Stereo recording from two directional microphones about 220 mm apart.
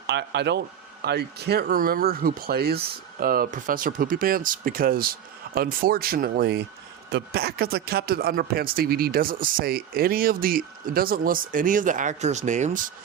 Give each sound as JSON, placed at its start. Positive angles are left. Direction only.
{"t": 0.1, "sound": "speech", "side_deg": -50}